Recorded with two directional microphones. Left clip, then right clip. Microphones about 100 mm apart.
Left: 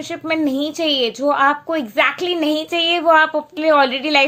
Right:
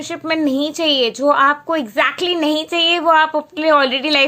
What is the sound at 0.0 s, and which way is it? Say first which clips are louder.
A woman's voice: right 1 dB; 20° right (ahead or behind).